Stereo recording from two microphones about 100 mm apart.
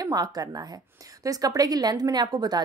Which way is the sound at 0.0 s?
40° right (ahead or behind).